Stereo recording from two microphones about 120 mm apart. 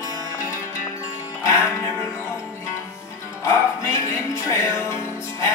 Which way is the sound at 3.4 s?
20° left (ahead or behind).